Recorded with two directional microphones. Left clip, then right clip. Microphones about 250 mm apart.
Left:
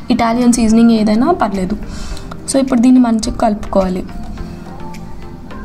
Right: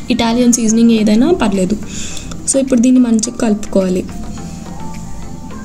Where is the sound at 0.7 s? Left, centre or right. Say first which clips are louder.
Left 1 dB; left.